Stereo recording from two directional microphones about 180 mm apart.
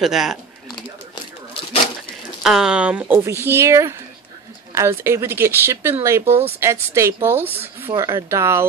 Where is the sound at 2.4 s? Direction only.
5° right (ahead or behind).